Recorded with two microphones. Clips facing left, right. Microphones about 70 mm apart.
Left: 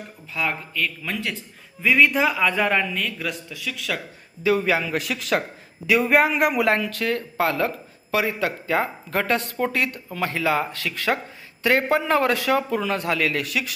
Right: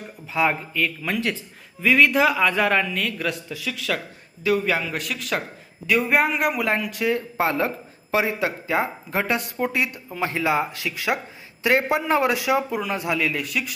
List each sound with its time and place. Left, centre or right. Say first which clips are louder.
0.3 s speech: right 4 dB; centre
1.8 s a man's voice: right 1 dB; centre
4.4 s a man's voice: left 1 dB; centre
6.8 s speech: right 2 dB; centre